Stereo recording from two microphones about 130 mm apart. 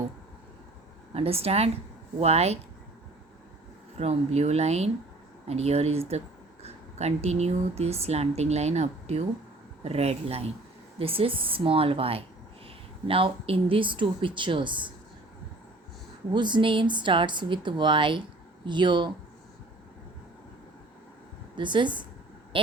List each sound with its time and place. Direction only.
1.1 s speech: 50° right (ahead or behind)
3.9 s speech: 55° right (ahead or behind); by 14.9 s 40° right (ahead or behind)
16.3 s speech: 35° right (ahead or behind)
21.5 s speech: 35° right (ahead or behind)